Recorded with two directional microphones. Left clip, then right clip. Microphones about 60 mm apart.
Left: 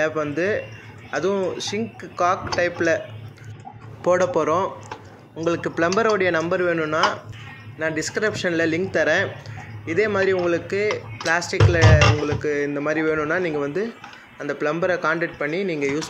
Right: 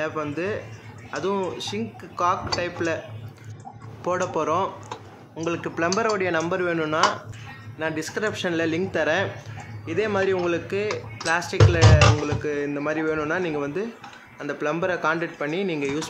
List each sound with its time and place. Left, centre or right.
0.0 s speech: left
4.0 s speech: left
6.5 s speech: left
7.8 s speech: left
12.0 s speech: centre
12.4 s speech: left
12.8 s speech: left